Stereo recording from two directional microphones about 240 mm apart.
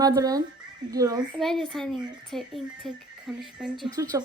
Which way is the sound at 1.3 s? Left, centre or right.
Centre.